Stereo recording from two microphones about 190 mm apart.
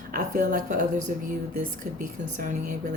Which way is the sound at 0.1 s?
45° right (ahead or behind).